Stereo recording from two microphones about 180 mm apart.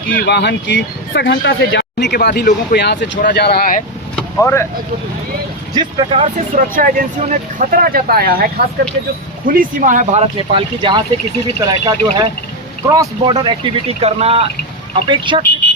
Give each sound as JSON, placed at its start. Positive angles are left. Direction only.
{"t": 0.1, "sound": "speech", "side_deg": 60}
{"t": 1.3, "sound": "speech", "side_deg": 75}
{"t": 2.7, "sound": "speech", "side_deg": 70}
{"t": 3.2, "sound": "speech", "side_deg": 50}
{"t": 4.1, "sound": "vehicle", "side_deg": 10}
{"t": 5.7, "sound": "speech", "side_deg": -30}
{"t": 6.7, "sound": "speech", "side_deg": -45}
{"t": 10.3, "sound": "speech", "side_deg": -25}